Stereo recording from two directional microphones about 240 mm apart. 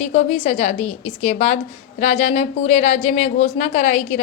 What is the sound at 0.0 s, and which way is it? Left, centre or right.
A woman's voice, left.